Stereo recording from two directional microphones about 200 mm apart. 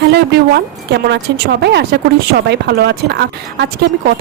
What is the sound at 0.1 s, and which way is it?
Speech, 55° right (ahead or behind).